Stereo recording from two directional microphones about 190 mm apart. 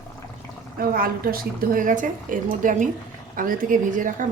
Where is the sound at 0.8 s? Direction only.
50° right (ahead or behind).